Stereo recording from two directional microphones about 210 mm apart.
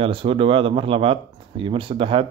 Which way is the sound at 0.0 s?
25° right (ahead or behind).